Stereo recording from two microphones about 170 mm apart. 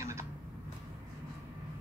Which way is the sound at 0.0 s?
15° right (ahead or behind).